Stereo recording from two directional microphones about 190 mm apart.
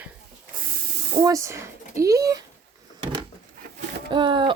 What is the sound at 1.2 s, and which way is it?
Speech, 15° right (ahead or behind).